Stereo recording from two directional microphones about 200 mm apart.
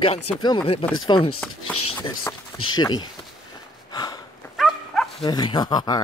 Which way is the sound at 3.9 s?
20° left (ahead or behind).